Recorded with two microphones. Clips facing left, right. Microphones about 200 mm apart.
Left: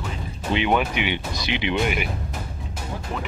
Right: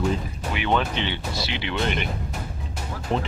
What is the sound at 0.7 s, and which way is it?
Speech, 10° left (ahead or behind).